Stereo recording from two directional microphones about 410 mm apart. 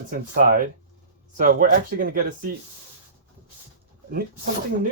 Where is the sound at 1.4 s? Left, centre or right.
Centre.